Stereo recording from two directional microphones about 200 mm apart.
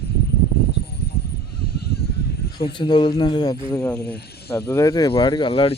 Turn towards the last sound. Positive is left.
turn(degrees=30)  # may be behind; listen again after turning